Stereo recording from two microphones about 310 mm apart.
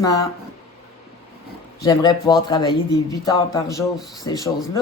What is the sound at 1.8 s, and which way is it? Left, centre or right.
Speech, centre.